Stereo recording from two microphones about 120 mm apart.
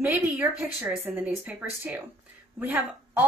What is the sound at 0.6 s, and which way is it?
A woman's voice, 15° right (ahead or behind).